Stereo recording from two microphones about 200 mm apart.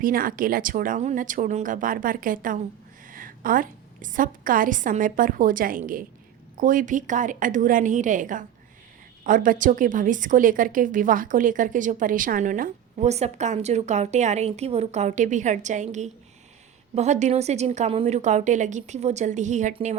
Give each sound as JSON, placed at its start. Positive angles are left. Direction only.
{"t": 0.0, "sound": "a woman's voice", "side_deg": -45}